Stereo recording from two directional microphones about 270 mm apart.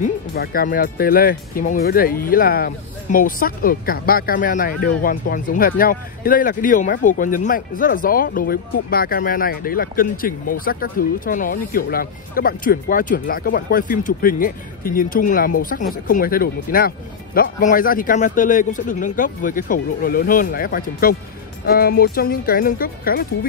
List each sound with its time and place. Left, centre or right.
0.0 s speech: left